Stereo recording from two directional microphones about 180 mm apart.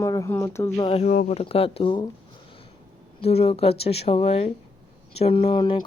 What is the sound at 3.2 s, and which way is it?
Speech, 35° left (ahead or behind).